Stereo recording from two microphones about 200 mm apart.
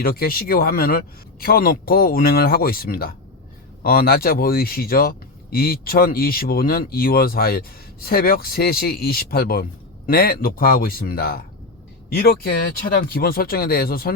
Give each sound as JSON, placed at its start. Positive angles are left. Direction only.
{"t": 0.0, "sound": "speech", "side_deg": 50}